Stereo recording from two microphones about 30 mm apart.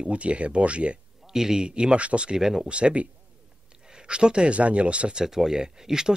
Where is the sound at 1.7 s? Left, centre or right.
Right.